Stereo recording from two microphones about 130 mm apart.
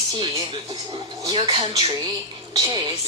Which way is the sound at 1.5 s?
35° right (ahead or behind).